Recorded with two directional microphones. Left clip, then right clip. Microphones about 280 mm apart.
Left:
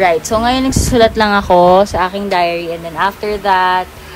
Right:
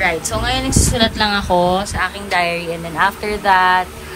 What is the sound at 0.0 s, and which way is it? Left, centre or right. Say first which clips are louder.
A woman's voice: left 6 dB; centre.